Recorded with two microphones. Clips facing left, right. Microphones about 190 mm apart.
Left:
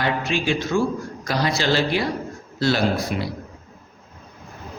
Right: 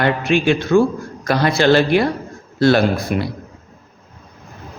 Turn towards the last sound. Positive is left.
turn(degrees=-55)  # may be behind; listen again after turning